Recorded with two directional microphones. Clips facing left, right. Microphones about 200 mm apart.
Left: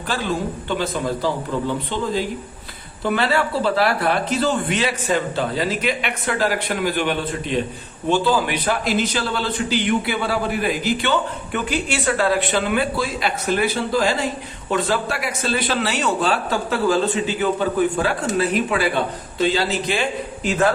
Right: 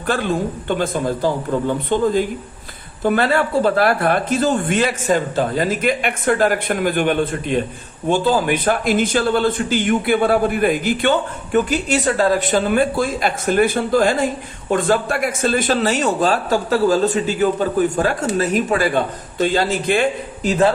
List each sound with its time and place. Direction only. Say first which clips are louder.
0.8 s speech: right 3 dB; 50° right (ahead or behind)